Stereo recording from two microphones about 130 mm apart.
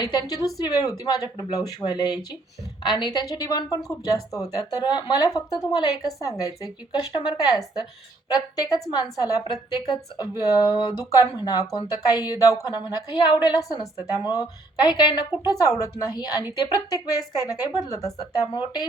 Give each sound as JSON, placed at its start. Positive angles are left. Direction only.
{"t": 0.0, "sound": "speech", "side_deg": 30}